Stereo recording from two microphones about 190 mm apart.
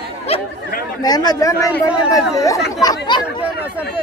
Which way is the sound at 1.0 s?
20° left (ahead or behind).